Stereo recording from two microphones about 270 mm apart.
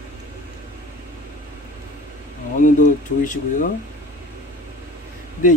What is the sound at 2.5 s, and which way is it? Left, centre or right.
Speech, left.